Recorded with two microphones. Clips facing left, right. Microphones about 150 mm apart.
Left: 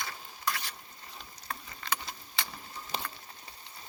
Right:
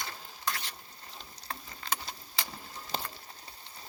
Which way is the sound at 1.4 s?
35° right (ahead or behind).